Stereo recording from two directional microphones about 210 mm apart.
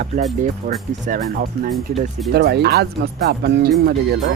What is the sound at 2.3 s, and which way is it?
Speech, 50° right (ahead or behind).